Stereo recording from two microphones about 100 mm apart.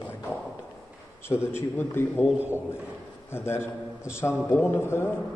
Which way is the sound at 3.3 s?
25° left (ahead or behind).